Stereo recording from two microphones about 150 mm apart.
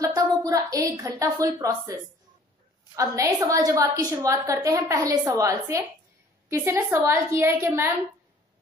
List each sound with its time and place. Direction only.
0.0 s a woman's voice: 25° right (ahead or behind)
3.0 s a woman's voice: 25° right (ahead or behind)